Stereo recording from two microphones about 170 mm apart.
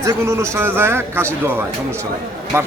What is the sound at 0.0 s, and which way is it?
Speech, 15° right (ahead or behind).